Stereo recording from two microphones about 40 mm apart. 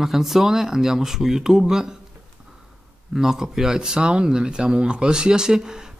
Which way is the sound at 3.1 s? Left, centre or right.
Centre.